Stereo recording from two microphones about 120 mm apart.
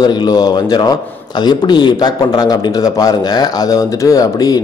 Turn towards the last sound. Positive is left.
turn(degrees=30)  # may be behind; listen again after turning